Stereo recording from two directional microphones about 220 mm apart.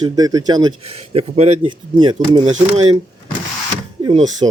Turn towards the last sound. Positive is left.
turn(degrees=-20)  # may be behind; listen again after turning